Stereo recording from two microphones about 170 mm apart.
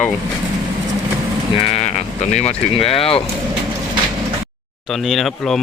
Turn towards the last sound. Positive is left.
turn(degrees=0)  # may be behind; listen again after turning